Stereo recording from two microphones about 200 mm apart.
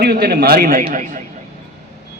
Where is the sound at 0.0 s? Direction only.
50° right (ahead or behind).